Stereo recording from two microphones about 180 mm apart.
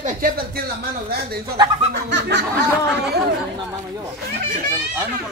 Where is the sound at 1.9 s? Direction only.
75° right (ahead or behind).